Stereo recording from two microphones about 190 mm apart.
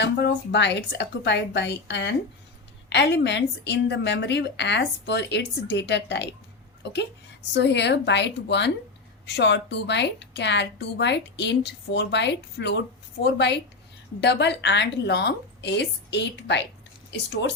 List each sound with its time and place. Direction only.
0.0 s a woman's voice: 65° left (ahead or behind)
7.5 s a woman's voice: 65° left (ahead or behind)